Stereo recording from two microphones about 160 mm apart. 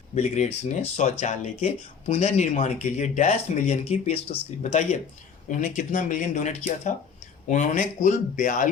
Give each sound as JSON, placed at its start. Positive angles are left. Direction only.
{"t": 0.1, "sound": "speech", "side_deg": 45}